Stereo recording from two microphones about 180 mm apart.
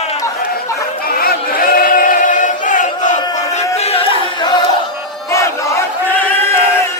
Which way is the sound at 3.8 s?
35° left (ahead or behind).